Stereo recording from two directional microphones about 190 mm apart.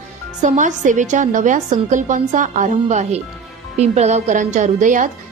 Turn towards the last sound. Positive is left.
turn(degrees=-40)  # may be behind; listen again after turning